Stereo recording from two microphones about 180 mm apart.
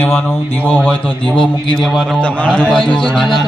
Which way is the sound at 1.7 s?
Centre (ahead or behind).